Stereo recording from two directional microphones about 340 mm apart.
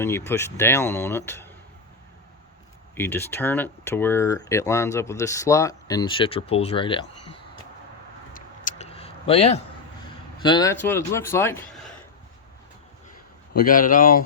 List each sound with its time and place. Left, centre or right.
0.0 s speech: centre
2.9 s speech: centre
8.3 s a sound: left
10.4 s speech: centre
13.7 s speech: left